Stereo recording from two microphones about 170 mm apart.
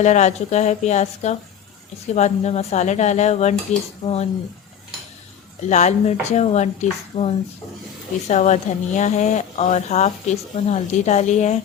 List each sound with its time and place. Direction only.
0.0 s speech: 45° left (ahead or behind)
5.6 s speech: 45° left (ahead or behind)